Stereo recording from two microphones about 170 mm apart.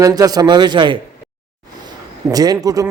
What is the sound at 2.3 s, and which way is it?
Speech, 20° right (ahead or behind).